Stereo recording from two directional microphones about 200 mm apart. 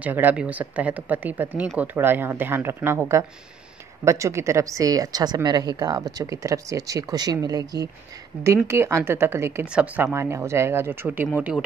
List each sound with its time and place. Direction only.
0.0 s a woman's voice: 10° right (ahead or behind)